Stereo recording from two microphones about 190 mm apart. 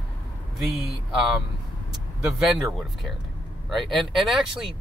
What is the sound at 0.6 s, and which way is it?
Speech, centre (ahead or behind).